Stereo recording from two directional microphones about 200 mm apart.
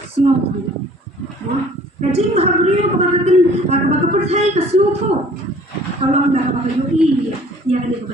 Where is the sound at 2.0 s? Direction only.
30° right (ahead or behind).